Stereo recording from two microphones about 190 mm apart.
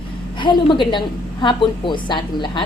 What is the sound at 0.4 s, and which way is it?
A woman's voice, 25° left (ahead or behind).